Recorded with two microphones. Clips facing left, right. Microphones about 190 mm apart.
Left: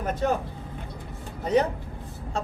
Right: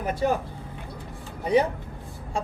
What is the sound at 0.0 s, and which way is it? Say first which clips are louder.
Speech: right 1 dB; 10° right (ahead or behind).